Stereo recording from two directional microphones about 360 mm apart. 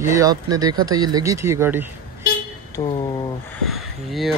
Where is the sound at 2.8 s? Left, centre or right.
Centre.